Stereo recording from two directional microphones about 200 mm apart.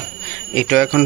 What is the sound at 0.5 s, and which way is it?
Speech, 5° left (ahead or behind).